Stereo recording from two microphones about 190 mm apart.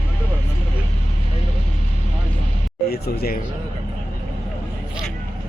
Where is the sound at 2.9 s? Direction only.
55° left (ahead or behind).